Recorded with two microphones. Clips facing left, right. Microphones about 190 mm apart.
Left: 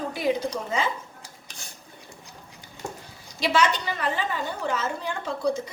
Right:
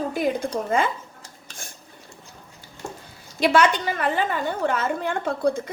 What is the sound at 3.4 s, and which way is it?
A woman's voice, 55° right (ahead or behind).